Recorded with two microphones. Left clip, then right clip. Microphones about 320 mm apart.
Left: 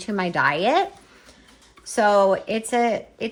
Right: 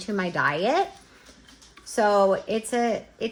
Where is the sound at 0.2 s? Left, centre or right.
Left.